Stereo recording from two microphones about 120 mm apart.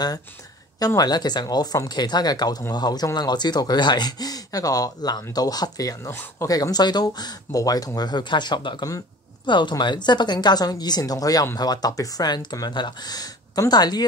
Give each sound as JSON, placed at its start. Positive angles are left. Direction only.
{"t": 0.7, "sound": "speech", "side_deg": 30}